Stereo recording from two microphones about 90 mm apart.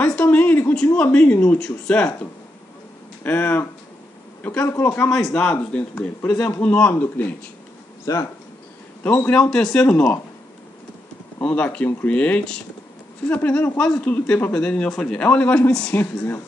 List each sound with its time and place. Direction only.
0.0 s a sound: 15° left (ahead or behind)
0.9 s a man's voice: 15° left (ahead or behind)
3.3 s speech: 20° left (ahead or behind)
5.1 s a man's voice: 10° left (ahead or behind)
8.0 s speech: 40° left (ahead or behind)
9.0 s speech: 20° left (ahead or behind)
9.4 s speech: 5° left (ahead or behind)
11.4 s a man's voice: 10° left (ahead or behind)
15.9 s speech: 25° left (ahead or behind)